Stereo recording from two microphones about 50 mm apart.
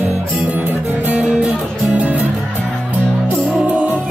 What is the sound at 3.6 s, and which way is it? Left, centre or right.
Music, right.